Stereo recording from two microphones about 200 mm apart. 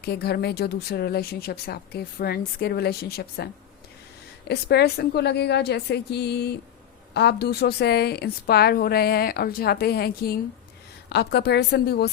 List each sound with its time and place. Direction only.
0.0 s a woman's voice: 55° left (ahead or behind)